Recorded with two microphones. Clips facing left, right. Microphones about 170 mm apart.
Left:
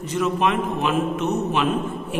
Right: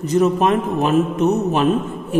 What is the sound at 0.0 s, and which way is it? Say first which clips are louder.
A man's voice: right 6 dB; 40° right (ahead or behind).